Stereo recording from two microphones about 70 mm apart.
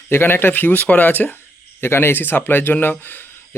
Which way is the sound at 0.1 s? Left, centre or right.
Left.